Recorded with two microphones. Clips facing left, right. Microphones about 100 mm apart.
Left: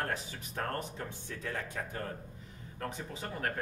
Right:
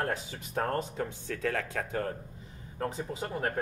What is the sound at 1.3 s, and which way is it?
Speech, 90° right.